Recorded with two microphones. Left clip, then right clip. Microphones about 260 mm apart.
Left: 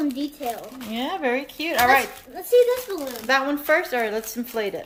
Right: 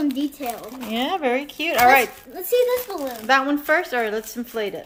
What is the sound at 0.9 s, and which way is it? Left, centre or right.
Speech, centre.